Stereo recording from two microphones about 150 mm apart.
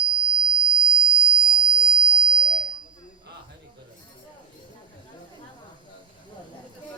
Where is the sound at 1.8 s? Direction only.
35° right (ahead or behind).